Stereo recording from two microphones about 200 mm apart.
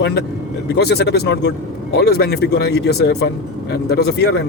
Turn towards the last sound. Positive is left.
turn(degrees=55)  # may be behind; listen again after turning